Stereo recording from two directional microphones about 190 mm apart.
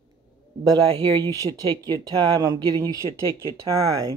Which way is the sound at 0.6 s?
25° right (ahead or behind).